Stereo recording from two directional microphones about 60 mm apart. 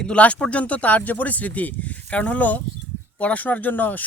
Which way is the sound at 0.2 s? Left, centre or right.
Left.